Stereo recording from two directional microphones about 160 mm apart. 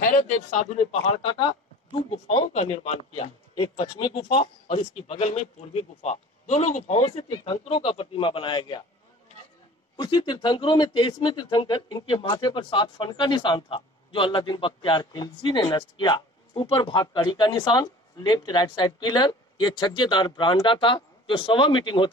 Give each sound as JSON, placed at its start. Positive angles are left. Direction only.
{"t": 0.0, "sound": "a man's voice", "side_deg": 50}
{"t": 2.0, "sound": "speech", "side_deg": 40}
{"t": 9.9, "sound": "speech", "side_deg": 25}